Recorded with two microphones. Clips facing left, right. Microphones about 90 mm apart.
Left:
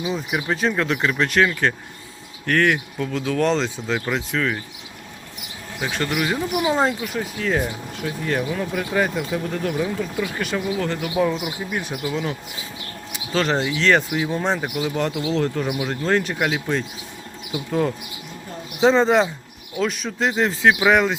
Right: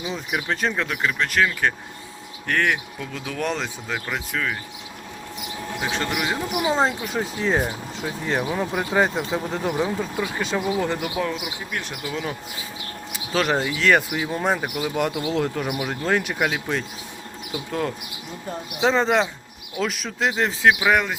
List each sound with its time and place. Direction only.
0.0 s speech: 5° left (ahead or behind)
2.5 s speech: 15° right (ahead or behind)
3.0 s speech: 5° right (ahead or behind)
5.9 s speech: 20° right (ahead or behind)
11.1 s speech: 5° left (ahead or behind)
12.0 s speech: centre (ahead or behind)